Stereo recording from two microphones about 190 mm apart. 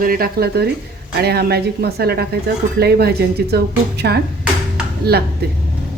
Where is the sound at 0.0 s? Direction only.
50° right (ahead or behind).